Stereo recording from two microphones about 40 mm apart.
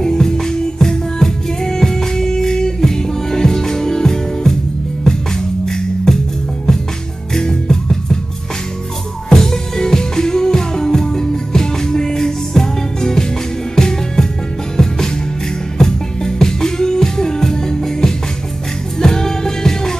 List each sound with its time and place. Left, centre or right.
0.0 s music: centre
7.3 s music: centre
9.3 s music: centre